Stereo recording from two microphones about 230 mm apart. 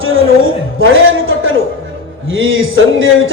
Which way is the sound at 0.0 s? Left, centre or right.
Right.